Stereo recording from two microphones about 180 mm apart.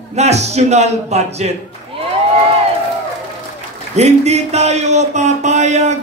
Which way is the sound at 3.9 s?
40° right (ahead or behind).